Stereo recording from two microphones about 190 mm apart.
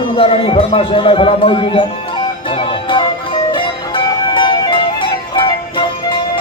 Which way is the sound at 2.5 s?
30° left (ahead or behind).